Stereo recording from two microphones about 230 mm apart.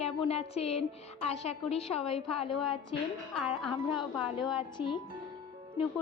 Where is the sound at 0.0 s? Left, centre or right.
Left.